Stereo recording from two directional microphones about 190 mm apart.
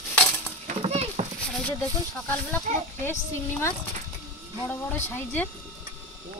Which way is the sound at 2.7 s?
40° right (ahead or behind).